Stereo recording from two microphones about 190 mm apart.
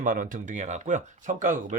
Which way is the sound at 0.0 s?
45° right (ahead or behind).